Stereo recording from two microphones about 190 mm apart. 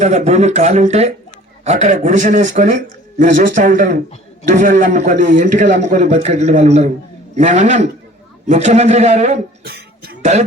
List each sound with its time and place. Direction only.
0.0 s a man's voice: 40° right (ahead or behind)
9.6 s cough: 55° right (ahead or behind)